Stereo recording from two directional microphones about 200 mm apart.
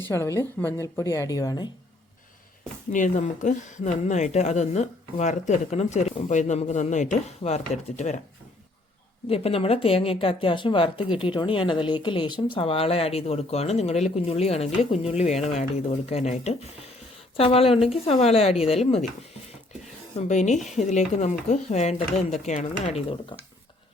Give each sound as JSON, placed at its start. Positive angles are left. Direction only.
{"t": 0.1, "sound": "a woman's voice", "side_deg": 15}
{"t": 2.9, "sound": "speech", "side_deg": 40}
{"t": 9.3, "sound": "speech", "side_deg": 30}
{"t": 20.1, "sound": "speech", "side_deg": 35}